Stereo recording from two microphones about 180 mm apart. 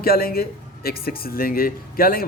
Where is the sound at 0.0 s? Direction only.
55° left (ahead or behind).